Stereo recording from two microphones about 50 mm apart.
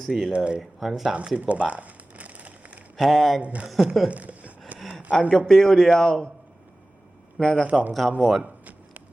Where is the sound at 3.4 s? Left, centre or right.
Right.